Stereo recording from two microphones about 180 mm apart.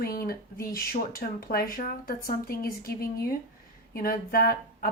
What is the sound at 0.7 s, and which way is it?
Speech, 55° left (ahead or behind).